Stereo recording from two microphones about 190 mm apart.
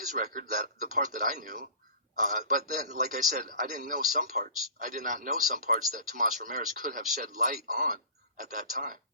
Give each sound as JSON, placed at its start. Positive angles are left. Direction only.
{"t": 0.0, "sound": "speech", "side_deg": -45}